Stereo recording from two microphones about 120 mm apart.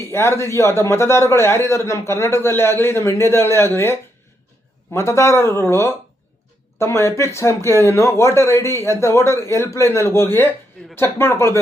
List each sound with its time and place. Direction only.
0.1 s a man's voice: 20° left (ahead or behind)